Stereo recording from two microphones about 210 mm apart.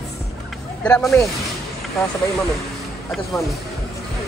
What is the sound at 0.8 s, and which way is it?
Speech, 5° left (ahead or behind).